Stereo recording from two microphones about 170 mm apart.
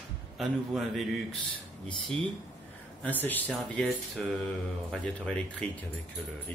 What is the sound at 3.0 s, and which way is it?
Speech, 10° left (ahead or behind).